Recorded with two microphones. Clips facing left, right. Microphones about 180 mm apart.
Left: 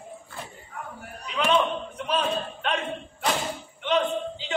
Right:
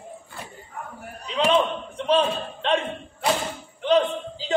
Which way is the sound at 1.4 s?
30° right (ahead or behind).